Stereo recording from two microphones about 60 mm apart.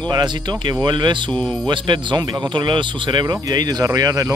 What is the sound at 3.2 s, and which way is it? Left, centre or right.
Speech, right.